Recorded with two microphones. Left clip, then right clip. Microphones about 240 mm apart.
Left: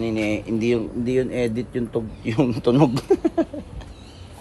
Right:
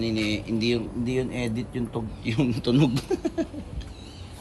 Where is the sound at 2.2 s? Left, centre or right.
Left.